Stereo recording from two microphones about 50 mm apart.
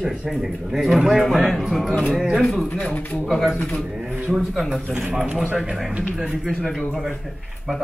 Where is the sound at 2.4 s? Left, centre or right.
Left.